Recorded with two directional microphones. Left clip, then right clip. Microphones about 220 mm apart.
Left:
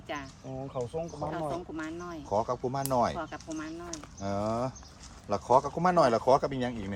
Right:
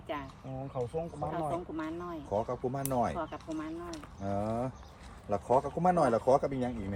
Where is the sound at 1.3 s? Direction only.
5° left (ahead or behind).